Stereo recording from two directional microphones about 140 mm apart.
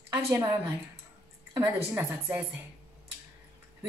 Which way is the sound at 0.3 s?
15° right (ahead or behind).